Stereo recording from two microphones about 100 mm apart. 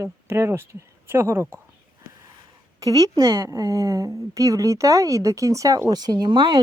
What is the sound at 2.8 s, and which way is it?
A woman's voice, 35° right (ahead or behind).